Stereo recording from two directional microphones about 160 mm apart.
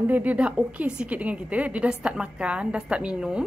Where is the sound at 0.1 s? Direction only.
10° right (ahead or behind).